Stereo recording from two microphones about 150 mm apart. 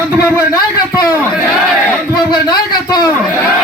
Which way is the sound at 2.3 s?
30° left (ahead or behind).